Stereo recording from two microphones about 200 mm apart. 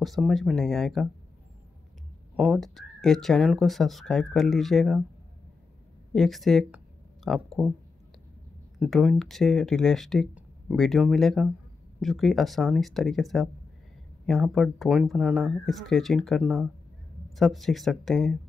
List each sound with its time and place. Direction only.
0.0 s speech: centre (ahead or behind)
2.3 s speech: 5° right (ahead or behind)
6.1 s speech: centre (ahead or behind)
8.7 s speech: centre (ahead or behind)